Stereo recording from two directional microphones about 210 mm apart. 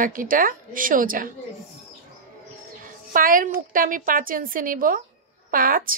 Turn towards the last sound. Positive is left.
turn(degrees=-40)  # may be behind; listen again after turning